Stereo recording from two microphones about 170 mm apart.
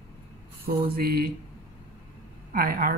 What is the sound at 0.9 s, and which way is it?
Speech, 65° right (ahead or behind).